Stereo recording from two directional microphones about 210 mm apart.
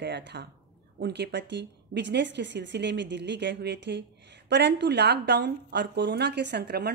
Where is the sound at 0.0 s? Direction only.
55° right (ahead or behind).